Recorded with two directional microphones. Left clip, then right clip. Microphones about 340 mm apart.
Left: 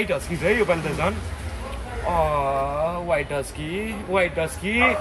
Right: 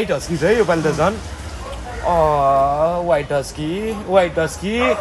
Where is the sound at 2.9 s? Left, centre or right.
Centre.